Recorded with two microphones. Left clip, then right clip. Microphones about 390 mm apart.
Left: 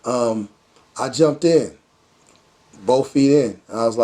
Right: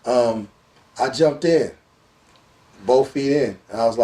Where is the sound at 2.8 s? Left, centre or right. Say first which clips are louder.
Left 1 dB; left.